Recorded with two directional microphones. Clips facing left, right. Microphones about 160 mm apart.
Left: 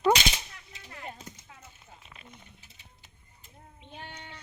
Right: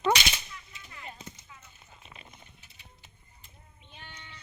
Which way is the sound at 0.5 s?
55° left (ahead or behind).